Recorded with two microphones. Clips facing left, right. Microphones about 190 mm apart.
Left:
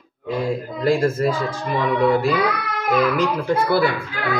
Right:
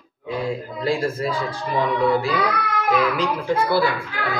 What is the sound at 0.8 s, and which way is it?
Speech, 45° left (ahead or behind).